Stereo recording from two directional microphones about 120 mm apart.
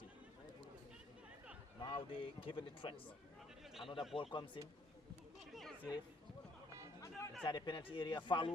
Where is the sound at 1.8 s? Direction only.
50° left (ahead or behind).